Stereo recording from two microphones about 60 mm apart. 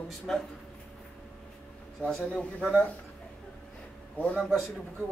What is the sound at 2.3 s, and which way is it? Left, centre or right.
Speech, centre.